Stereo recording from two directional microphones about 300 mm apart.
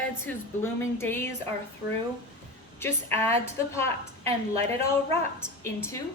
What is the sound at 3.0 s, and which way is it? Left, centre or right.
Speech, centre.